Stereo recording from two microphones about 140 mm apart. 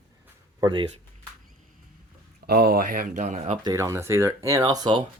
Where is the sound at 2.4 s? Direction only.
90° right; by 3.6 s 55° right (ahead or behind).